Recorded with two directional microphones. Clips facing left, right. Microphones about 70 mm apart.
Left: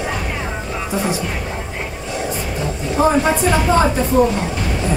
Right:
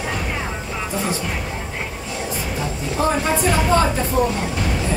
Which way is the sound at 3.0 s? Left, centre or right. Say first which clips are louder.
Left 5 dB; centre.